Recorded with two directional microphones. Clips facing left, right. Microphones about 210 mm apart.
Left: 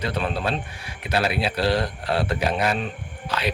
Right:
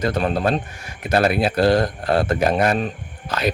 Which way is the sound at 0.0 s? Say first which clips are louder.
Right 6 dB; 45° right (ahead or behind).